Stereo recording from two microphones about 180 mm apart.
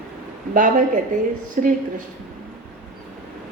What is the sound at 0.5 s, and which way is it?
A woman's voice, 45° right (ahead or behind).